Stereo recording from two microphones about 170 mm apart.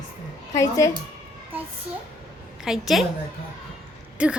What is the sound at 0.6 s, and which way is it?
Speech, 20° left (ahead or behind).